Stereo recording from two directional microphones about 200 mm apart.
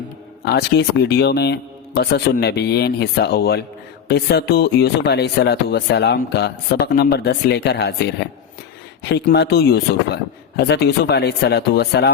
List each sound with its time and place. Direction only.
0.4 s speech: 55° left (ahead or behind)
9.0 s speech: 55° left (ahead or behind)